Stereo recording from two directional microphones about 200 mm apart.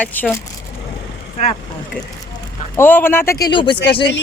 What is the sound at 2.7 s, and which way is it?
Speech, 10° left (ahead or behind).